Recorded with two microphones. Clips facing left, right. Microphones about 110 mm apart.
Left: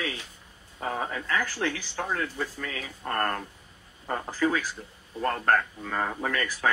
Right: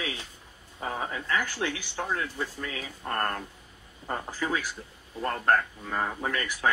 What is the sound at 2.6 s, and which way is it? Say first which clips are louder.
Speech: left 1 dB; 35° left (ahead or behind).